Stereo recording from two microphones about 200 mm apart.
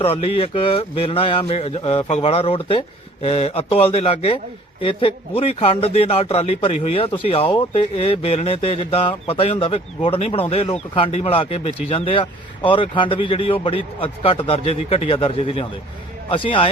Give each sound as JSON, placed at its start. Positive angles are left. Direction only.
{"t": 0.0, "sound": "speech", "side_deg": 30}